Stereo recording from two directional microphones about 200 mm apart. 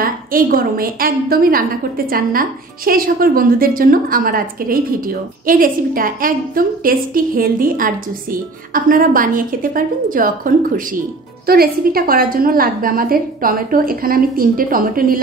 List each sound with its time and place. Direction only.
0.0 s a woman's voice: 45° right (ahead or behind)